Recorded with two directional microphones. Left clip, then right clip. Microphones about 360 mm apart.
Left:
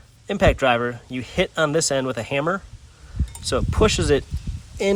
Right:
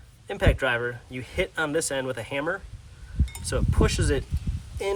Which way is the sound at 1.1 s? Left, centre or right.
Centre.